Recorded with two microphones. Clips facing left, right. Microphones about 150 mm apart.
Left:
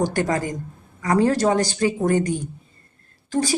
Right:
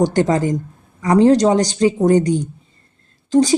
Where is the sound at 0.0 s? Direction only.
25° right (ahead or behind).